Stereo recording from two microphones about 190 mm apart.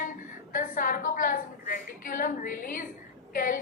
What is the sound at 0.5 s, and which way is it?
A woman's voice, 45° left (ahead or behind).